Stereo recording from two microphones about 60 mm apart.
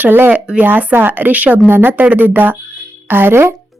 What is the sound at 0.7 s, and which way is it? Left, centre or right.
A woman's voice, right.